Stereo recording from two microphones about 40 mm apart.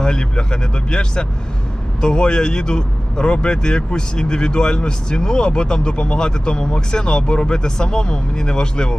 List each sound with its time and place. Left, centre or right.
0.0 s speech: left